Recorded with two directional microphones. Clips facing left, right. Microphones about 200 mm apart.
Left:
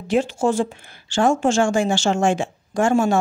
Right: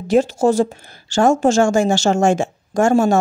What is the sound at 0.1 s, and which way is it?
A woman's voice, 40° right (ahead or behind).